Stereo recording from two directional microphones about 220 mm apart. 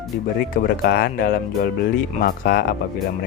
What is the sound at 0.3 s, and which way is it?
Speech, 45° left (ahead or behind).